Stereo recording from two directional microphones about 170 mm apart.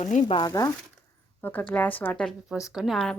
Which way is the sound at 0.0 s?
45° left (ahead or behind).